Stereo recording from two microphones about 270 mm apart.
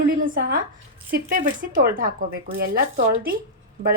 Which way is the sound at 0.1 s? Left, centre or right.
Right.